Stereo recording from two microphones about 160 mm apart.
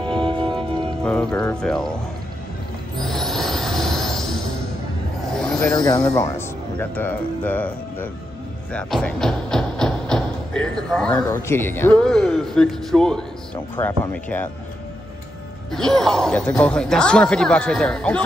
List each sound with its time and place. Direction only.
0.0 s music: 30° right (ahead or behind)
0.6 s music: 5° left (ahead or behind)
1.3 s speech: 10° left (ahead or behind)
3.0 s train: centre (ahead or behind)
5.3 s a sound: 5° left (ahead or behind)
5.8 s speech: 25° left (ahead or behind)
8.7 s a sound: 5° left (ahead or behind)
11.4 s speech: 15° left (ahead or behind)
15.7 s speech: 5° left (ahead or behind)